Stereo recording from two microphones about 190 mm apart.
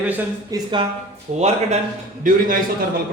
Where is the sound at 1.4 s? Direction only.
35° right (ahead or behind).